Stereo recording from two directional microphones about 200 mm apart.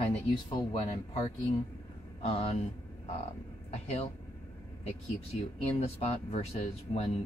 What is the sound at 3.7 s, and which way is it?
Speech, 30° left (ahead or behind).